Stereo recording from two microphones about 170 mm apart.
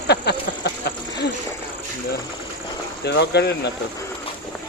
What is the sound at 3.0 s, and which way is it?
Speech, 80° left.